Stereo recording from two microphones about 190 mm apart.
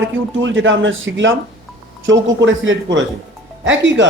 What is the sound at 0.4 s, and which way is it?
A man's voice, 80° right.